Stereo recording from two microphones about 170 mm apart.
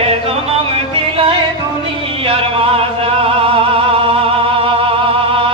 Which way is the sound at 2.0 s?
35° right (ahead or behind).